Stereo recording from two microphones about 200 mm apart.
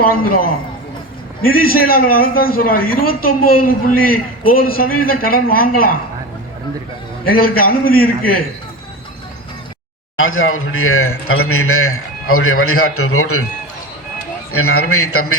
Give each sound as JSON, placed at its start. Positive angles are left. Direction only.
{"t": 0.0, "sound": "a man's voice", "side_deg": 45}
{"t": 7.3, "sound": "a man's voice", "side_deg": 45}
{"t": 10.2, "sound": "a man's voice", "side_deg": 90}
{"t": 14.5, "sound": "a man's voice", "side_deg": 90}